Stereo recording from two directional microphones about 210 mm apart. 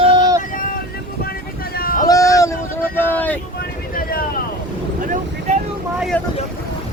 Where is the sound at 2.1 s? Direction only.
15° left (ahead or behind).